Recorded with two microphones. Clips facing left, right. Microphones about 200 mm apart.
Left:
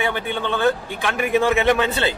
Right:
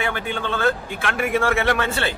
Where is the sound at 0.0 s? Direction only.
15° left (ahead or behind).